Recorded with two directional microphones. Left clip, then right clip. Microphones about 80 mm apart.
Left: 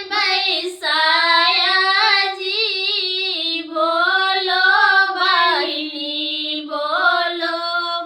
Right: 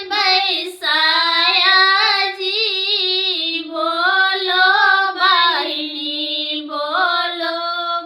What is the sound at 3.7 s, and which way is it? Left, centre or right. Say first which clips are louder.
Child singing: even; right.